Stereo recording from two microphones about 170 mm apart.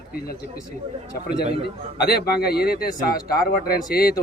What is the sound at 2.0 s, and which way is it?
A man's voice, 70° left (ahead or behind).